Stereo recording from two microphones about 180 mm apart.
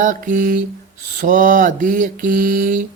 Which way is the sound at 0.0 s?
45° right (ahead or behind).